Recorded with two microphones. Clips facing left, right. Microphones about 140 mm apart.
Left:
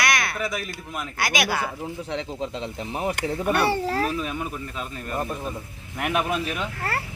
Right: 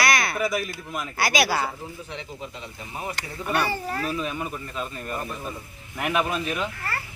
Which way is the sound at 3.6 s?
80° left.